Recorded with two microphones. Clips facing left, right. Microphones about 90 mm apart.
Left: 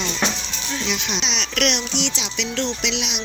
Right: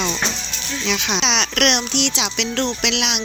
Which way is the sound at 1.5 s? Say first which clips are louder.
Even; 60° right (ahead or behind).